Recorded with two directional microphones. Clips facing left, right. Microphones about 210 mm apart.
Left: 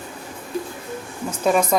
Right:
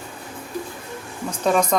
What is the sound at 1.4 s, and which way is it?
Speech, 5° left (ahead or behind).